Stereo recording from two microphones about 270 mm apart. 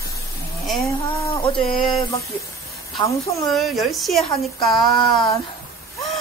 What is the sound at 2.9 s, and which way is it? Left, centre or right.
Speech, centre.